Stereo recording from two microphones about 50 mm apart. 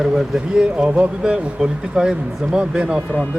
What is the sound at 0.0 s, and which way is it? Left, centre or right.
A man's voice, centre.